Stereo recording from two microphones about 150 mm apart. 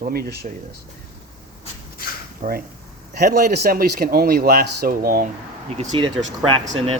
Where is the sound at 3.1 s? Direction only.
90° right; by 5.2 s 75° right (ahead or behind).